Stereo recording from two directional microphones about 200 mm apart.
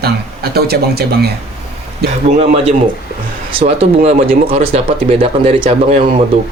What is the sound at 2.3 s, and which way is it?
Speech, 30° right (ahead or behind).